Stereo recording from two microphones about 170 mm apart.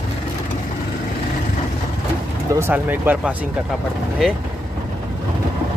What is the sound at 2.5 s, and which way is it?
Speech, 10° right (ahead or behind).